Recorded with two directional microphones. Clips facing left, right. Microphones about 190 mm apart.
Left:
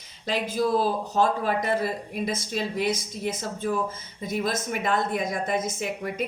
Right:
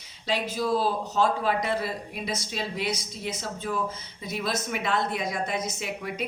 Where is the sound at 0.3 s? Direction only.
50° left (ahead or behind).